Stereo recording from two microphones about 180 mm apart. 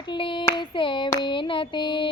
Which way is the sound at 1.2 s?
25° left (ahead or behind).